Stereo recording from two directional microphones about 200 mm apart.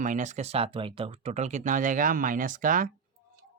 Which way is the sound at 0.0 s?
40° right (ahead or behind).